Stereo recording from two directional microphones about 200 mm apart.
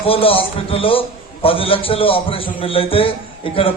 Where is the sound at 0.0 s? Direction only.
30° left (ahead or behind).